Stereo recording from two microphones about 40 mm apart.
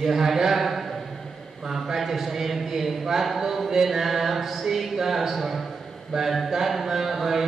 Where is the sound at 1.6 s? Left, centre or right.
Centre.